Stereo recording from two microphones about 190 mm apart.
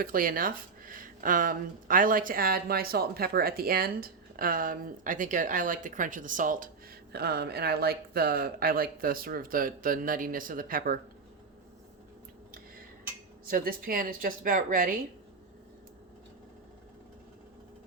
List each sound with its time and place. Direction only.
0.0 s speech: 50° right (ahead or behind)
7.1 s speech: 55° right (ahead or behind)
13.4 s speech: 50° right (ahead or behind)